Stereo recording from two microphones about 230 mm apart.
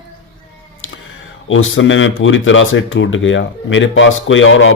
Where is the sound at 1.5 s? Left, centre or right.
Left.